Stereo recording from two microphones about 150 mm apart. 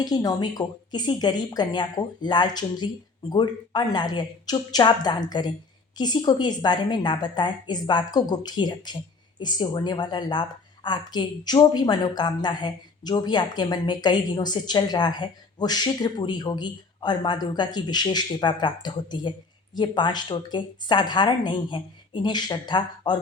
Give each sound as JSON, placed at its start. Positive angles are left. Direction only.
{"t": 0.0, "sound": "a woman's voice", "side_deg": 25}